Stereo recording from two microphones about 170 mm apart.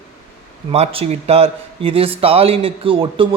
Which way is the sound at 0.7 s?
35° right (ahead or behind).